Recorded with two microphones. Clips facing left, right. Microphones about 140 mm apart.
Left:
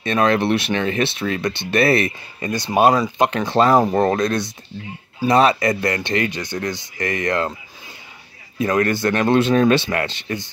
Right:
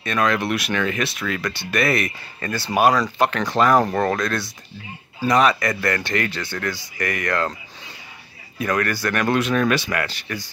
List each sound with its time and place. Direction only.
0.0 s speech: 25° left (ahead or behind)
8.5 s speech: 25° left (ahead or behind)